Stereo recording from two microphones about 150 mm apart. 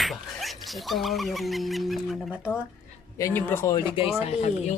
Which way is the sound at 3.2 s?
15° left (ahead or behind).